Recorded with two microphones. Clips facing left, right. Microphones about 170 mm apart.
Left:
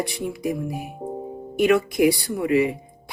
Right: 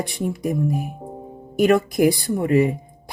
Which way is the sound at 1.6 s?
40° right (ahead or behind).